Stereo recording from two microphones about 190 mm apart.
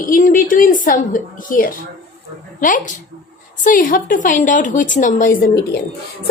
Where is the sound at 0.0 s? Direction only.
45° left (ahead or behind).